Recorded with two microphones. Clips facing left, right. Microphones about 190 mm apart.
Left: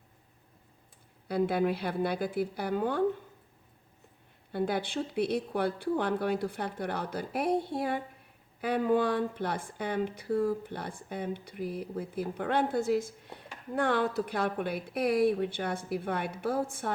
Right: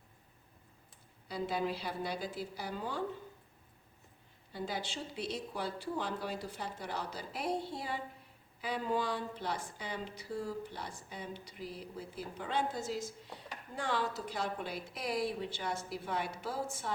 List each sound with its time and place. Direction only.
1.3 s speech: 60° left (ahead or behind)
4.5 s speech: 60° left (ahead or behind)